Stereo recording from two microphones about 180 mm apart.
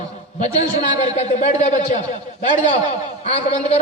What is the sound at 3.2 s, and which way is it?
Speech, 35° left (ahead or behind).